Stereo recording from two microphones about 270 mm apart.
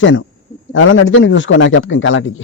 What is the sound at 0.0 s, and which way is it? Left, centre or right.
A man's voice, left.